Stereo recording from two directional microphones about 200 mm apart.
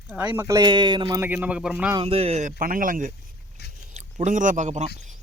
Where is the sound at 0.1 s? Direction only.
10° right (ahead or behind).